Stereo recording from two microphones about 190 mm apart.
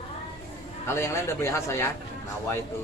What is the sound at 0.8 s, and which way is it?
Speech, 15° left (ahead or behind).